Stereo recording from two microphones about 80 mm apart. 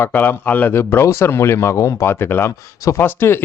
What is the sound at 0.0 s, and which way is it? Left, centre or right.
Speech, left.